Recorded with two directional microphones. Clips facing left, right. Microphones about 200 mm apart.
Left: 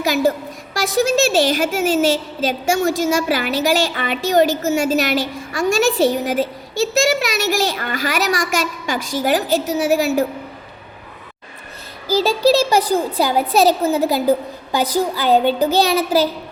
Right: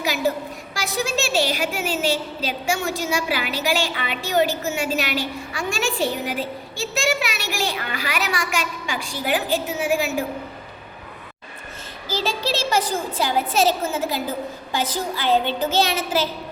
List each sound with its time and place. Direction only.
0.7 s a woman's voice: 45° left (ahead or behind)
12.0 s a woman's voice: 35° left (ahead or behind)